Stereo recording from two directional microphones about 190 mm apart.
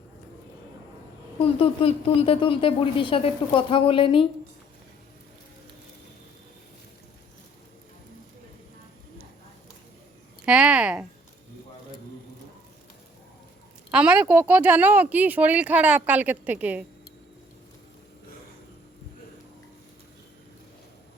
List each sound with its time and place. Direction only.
1.4 s a woman's voice: 30° left (ahead or behind)
10.4 s a sound: 5° right (ahead or behind)
13.9 s speech: 5° right (ahead or behind)